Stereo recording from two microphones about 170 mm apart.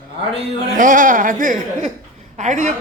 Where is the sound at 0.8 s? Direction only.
50° right (ahead or behind).